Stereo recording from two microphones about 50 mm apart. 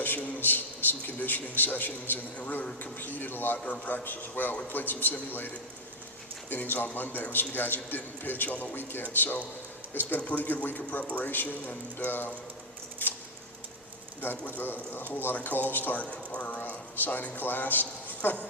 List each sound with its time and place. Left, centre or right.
0.3 s a man's voice: left
6.5 s a man's voice: left
13.0 s scissors: left
14.2 s a man's voice: left
16.0 s a man's voice: left